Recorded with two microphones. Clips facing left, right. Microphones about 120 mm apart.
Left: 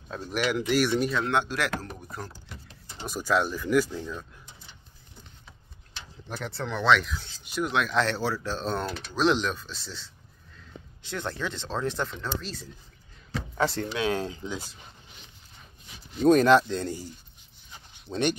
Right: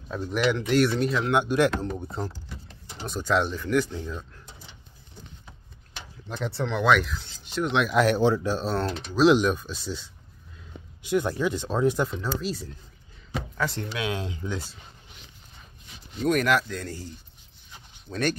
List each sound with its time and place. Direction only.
0.1 s speech: 5° left (ahead or behind)
1.3 s speech: 15° right (ahead or behind)
3.1 s speech: 5° left (ahead or behind)
6.5 s speech: 5° right (ahead or behind)
13.6 s speech: 30° left (ahead or behind)
16.3 s speech: 30° left (ahead or behind)
18.1 s speech: 20° left (ahead or behind)